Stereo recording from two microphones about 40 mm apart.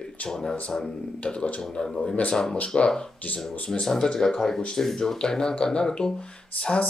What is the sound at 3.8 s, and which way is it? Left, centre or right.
Speech, centre.